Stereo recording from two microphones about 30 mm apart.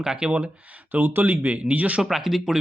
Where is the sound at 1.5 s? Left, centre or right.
Right.